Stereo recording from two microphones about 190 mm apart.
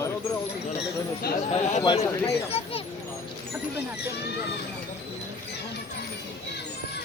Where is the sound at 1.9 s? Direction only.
30° left (ahead or behind).